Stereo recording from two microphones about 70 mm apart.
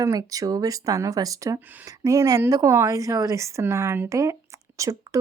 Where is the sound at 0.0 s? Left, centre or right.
Right.